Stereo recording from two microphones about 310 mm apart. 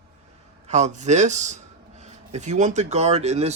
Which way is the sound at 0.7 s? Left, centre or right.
Right.